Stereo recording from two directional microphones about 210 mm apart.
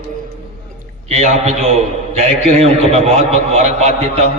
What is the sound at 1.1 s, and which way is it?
A man's voice, 35° right (ahead or behind).